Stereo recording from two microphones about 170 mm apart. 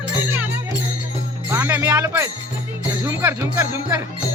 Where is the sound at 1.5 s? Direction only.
15° right (ahead or behind).